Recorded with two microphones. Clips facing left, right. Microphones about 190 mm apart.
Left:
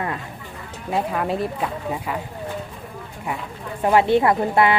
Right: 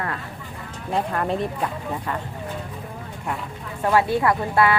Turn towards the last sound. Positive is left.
turn(degrees=20)  # may be behind; listen again after turning